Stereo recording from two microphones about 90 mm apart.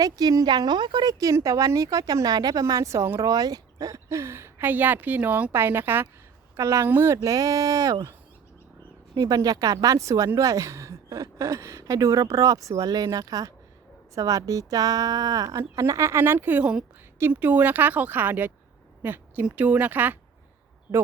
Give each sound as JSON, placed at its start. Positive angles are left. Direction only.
{"t": 0.0, "sound": "speech", "side_deg": -45}
{"t": 1.2, "sound": "a woman's voice", "side_deg": -35}
{"t": 9.1, "sound": "a woman's voice", "side_deg": -40}